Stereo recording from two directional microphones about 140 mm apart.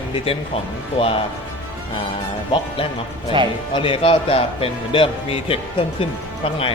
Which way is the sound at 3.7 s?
35° left (ahead or behind).